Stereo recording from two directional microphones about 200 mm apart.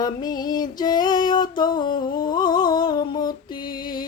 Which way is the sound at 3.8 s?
20° left (ahead or behind).